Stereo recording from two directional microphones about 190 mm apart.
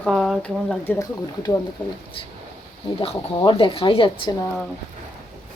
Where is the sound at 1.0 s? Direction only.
15° left (ahead or behind).